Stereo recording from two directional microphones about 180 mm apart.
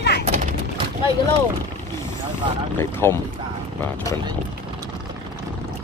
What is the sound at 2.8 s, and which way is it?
Speech, 15° left (ahead or behind).